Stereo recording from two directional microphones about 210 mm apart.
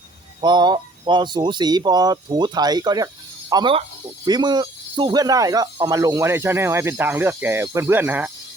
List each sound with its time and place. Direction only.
0.4 s speech: 20° right (ahead or behind)